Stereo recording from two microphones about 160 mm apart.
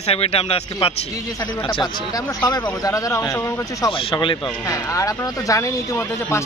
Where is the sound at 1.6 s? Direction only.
25° left (ahead or behind).